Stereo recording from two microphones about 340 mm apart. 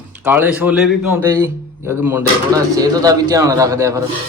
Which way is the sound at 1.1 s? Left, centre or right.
Centre.